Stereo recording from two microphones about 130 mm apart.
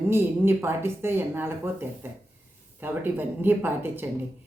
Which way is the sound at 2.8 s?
15° right (ahead or behind).